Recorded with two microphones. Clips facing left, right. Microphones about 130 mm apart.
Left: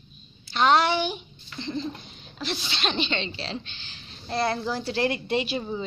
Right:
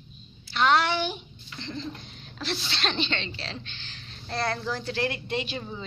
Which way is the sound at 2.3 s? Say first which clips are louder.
Left 1 dB; 15° left (ahead or behind).